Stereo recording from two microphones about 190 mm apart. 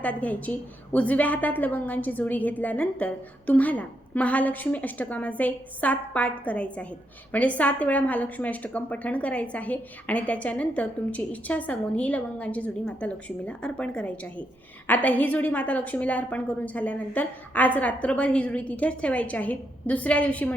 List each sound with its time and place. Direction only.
0.0 s a woman's voice: 5° left (ahead or behind)